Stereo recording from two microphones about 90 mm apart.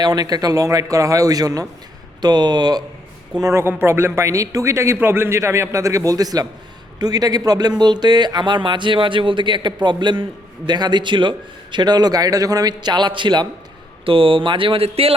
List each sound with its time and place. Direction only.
0.0 s a man's voice: 45° right (ahead or behind)
3.5 s a man's voice: 25° right (ahead or behind); by 13.5 s 55° right (ahead or behind)
14.0 s speech: 80° right